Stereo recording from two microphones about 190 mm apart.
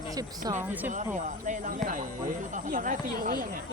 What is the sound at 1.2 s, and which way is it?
Speech, 40° right (ahead or behind).